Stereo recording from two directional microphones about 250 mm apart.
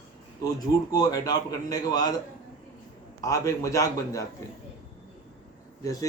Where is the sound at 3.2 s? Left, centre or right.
Centre.